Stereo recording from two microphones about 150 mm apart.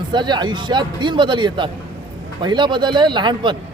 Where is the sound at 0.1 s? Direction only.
30° right (ahead or behind).